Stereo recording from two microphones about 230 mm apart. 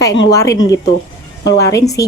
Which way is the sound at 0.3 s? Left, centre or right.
Centre.